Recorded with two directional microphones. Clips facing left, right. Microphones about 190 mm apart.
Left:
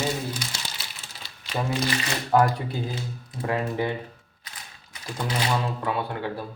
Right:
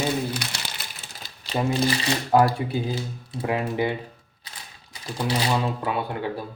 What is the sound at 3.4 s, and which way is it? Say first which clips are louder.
Speech: right 2 dB; 15° right (ahead or behind).